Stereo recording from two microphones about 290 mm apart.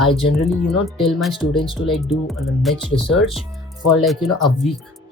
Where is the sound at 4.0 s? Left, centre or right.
Centre.